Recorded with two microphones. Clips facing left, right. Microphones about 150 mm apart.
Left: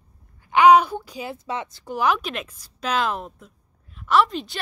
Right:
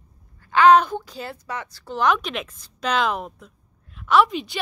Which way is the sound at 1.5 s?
20° left (ahead or behind).